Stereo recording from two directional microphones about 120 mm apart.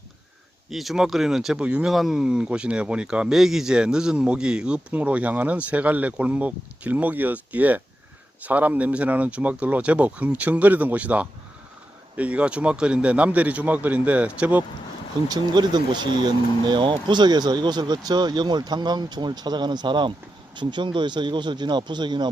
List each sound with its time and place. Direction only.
0.7 s speech: centre (ahead or behind)
15.3 s speech: 35° right (ahead or behind)